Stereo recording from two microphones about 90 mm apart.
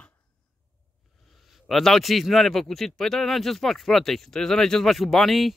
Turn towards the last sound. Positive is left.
turn(degrees=0)  # may be behind; listen again after turning